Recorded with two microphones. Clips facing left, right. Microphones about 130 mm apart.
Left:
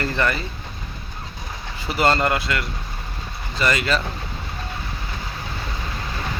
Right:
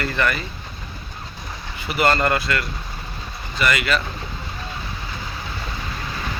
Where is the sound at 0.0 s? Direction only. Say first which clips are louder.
Even; 25° left (ahead or behind).